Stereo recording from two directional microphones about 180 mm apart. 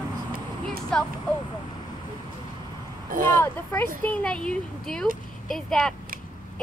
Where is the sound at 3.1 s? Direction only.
50° right (ahead or behind).